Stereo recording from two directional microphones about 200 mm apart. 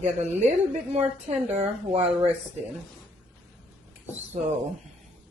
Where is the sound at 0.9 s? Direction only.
30° right (ahead or behind).